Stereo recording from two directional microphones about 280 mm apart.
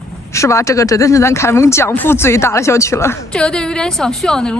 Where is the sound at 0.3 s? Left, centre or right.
Centre.